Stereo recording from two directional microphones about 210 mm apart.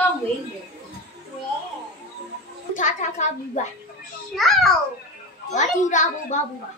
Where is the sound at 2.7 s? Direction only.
35° left (ahead or behind).